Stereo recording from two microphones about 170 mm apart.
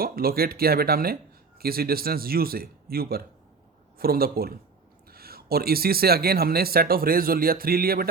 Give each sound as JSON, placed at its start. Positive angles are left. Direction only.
{"t": 0.0, "sound": "speech", "side_deg": -60}